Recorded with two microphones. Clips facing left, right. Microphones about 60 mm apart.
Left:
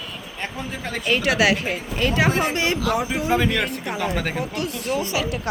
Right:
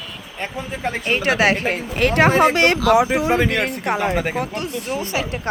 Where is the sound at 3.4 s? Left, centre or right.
Right.